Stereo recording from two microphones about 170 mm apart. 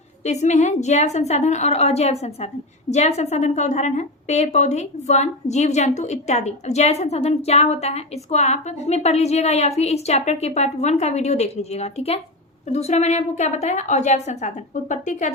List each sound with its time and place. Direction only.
0.3 s a woman's voice: 40° left (ahead or behind)